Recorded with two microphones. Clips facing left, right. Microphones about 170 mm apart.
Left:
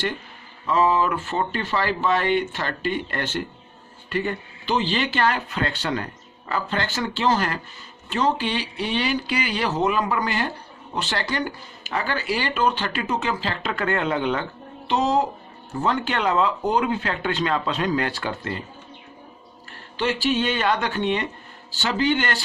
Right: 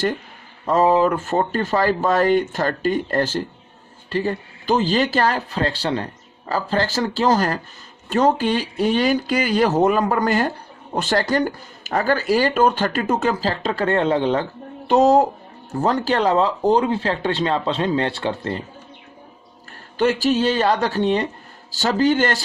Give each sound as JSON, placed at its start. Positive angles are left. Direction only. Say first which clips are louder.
{"t": 0.6, "sound": "speech", "louder": "right 4 dB", "side_deg": -45}
{"t": 14.8, "sound": "speech", "louder": "right 7 dB", "side_deg": -45}
{"t": 20.0, "sound": "speech", "louder": "right 5 dB", "side_deg": -45}